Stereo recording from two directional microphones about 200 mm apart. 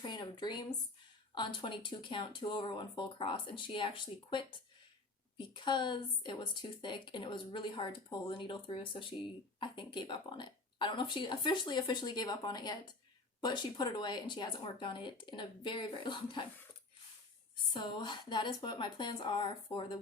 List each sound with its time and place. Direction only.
0.0 s a sound: 20° left (ahead or behind)
1.4 s a woman's voice: 25° left (ahead or behind)
17.7 s a woman's voice: 25° left (ahead or behind)